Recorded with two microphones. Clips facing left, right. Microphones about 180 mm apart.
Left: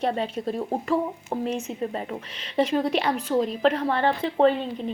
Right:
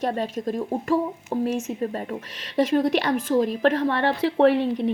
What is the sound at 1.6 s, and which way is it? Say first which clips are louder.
Speech: right 2 dB; 45° right (ahead or behind).